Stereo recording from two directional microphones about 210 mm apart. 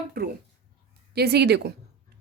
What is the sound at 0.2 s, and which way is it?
A woman's voice, 45° right (ahead or behind).